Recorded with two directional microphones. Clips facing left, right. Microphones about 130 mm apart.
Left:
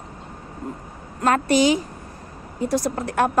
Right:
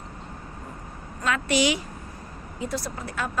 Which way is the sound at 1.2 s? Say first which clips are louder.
Left 6 dB; 45° left (ahead or behind).